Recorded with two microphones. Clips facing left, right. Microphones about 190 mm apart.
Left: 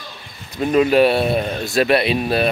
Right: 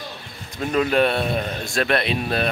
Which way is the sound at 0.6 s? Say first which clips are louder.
Left 5 dB; 10° left (ahead or behind).